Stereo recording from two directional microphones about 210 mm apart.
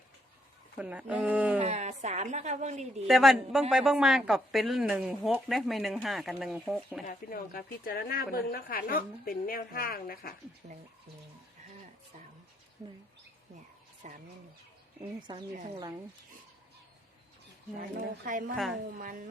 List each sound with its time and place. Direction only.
0.8 s speech: 5° right (ahead or behind)
1.5 s a woman's voice: 30° right (ahead or behind)
3.1 s a woman's voice: centre (ahead or behind)
7.1 s a woman's voice: 45° left (ahead or behind)
14.0 s a woman's voice: 40° right (ahead or behind)
15.5 s speech: 25° right (ahead or behind)
17.9 s a woman's voice: 40° right (ahead or behind)
18.5 s a woman's voice: centre (ahead or behind)